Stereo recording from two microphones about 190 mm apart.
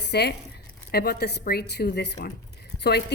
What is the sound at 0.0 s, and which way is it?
A woman's voice, 60° left (ahead or behind).